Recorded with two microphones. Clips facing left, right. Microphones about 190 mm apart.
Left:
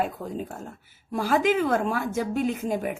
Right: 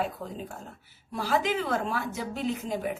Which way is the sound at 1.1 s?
50° left (ahead or behind).